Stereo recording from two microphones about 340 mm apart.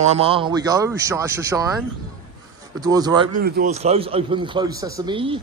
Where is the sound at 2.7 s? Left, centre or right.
Centre.